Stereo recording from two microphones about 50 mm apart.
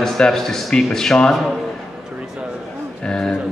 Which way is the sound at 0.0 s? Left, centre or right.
Centre.